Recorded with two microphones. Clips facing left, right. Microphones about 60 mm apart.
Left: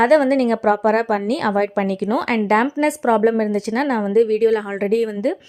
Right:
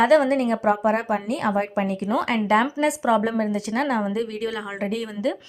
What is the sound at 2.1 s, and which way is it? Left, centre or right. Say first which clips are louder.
Speech: left 2 dB; left.